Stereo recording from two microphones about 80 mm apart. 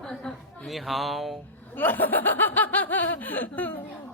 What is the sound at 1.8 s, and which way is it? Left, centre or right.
Speech, left.